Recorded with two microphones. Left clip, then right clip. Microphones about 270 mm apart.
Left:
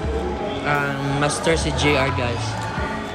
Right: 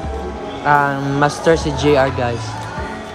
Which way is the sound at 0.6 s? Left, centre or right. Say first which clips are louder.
Right 9 dB; centre.